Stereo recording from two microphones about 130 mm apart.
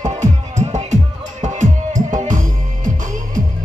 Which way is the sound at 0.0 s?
65° right (ahead or behind).